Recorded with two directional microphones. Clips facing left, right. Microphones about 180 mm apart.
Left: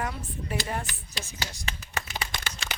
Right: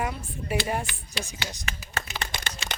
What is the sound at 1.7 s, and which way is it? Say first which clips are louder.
Speech: even; 30° left (ahead or behind).